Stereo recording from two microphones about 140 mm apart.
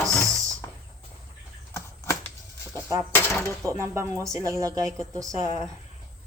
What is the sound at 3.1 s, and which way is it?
Speech, 15° left (ahead or behind).